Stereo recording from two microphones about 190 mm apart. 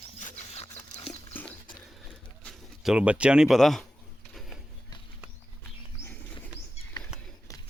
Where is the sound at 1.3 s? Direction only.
10° left (ahead or behind).